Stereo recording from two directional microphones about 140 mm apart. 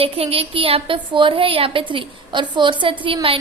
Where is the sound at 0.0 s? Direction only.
45° right (ahead or behind).